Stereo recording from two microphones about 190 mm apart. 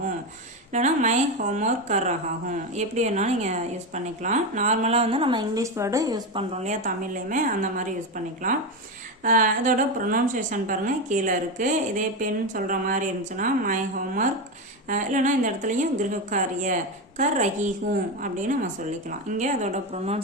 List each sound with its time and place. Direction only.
0.7 s a woman's voice: 40° right (ahead or behind); by 6.4 s 20° right (ahead or behind)
6.6 s a woman's voice: 40° right (ahead or behind)